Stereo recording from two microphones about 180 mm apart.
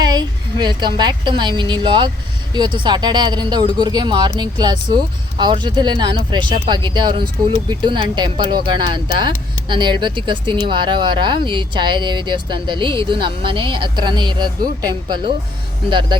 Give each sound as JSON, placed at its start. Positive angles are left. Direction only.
{"t": 0.0, "sound": "a woman's voice", "side_deg": -25}